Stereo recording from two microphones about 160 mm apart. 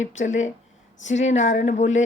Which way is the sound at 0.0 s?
50° left (ahead or behind).